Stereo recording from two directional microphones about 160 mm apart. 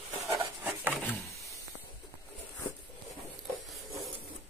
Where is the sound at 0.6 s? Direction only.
10° right (ahead or behind).